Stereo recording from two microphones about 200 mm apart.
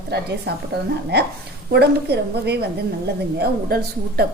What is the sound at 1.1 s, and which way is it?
A woman's voice, 55° right (ahead or behind).